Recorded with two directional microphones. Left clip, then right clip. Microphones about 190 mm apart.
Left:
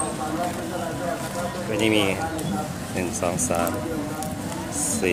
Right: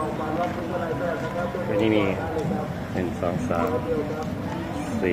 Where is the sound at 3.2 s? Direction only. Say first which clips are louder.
Left 2 dB; 20° left (ahead or behind).